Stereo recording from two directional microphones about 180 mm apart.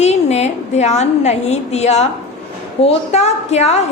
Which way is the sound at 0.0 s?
40° left (ahead or behind).